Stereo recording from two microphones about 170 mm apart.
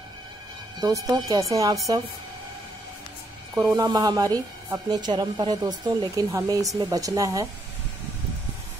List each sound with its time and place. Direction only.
0.7 s a woman's voice: 20° right (ahead or behind)
3.5 s a woman's voice: 20° right (ahead or behind)